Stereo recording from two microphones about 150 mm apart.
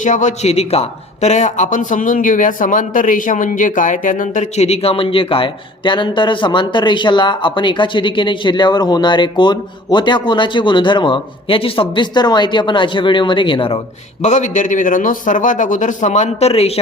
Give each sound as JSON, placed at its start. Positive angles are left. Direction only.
{"t": 0.0, "sound": "speech", "side_deg": 55}
{"t": 14.2, "sound": "a man's voice", "side_deg": 50}